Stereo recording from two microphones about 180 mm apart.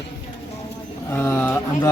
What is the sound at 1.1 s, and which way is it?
Speech, 15° left (ahead or behind).